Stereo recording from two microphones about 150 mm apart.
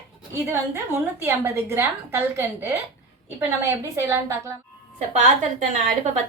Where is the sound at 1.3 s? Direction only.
15° right (ahead or behind).